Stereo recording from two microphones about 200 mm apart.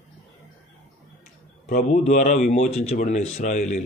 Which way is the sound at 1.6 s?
35° left (ahead or behind).